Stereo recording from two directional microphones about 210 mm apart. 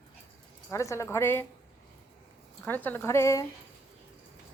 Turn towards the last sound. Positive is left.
turn(degrees=15)  # may be behind; listen again after turning